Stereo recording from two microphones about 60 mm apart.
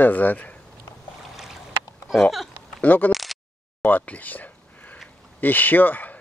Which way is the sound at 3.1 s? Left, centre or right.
Centre.